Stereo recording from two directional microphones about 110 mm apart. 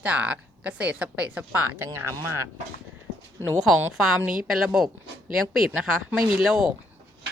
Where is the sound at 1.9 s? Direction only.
25° right (ahead or behind).